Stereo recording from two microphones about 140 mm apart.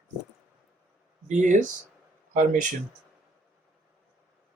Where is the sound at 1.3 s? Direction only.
65° right (ahead or behind).